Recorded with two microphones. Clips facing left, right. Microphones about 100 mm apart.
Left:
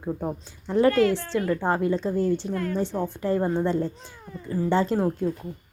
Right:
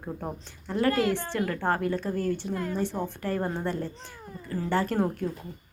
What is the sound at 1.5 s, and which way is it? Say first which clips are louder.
Speech: left 5 dB; 15° left (ahead or behind).